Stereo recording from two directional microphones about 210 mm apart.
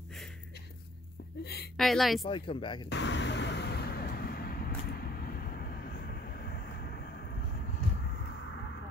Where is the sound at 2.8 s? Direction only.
60° left (ahead or behind).